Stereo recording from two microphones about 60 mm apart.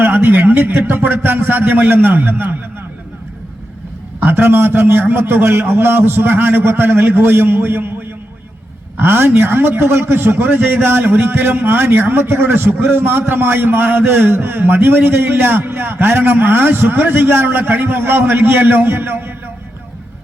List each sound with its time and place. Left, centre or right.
0.0 s a man's voice: right
4.2 s a man's voice: right